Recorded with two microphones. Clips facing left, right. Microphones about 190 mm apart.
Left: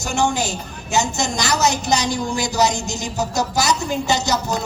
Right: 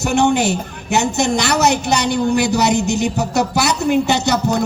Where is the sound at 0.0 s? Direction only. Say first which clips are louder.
Right 6 dB; 60° right (ahead or behind).